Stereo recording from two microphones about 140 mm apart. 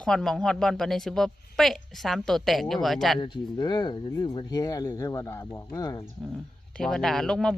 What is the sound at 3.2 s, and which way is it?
Speech, 35° left (ahead or behind).